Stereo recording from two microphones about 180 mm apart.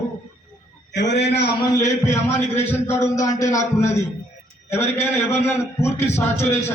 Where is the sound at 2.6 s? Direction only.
10° left (ahead or behind).